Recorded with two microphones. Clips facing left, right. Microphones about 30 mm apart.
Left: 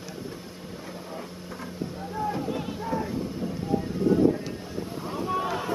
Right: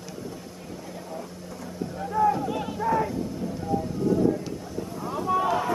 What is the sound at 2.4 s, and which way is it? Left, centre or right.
Music, centre.